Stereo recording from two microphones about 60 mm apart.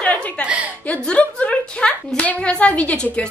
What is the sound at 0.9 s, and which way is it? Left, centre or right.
A woman's voice, left.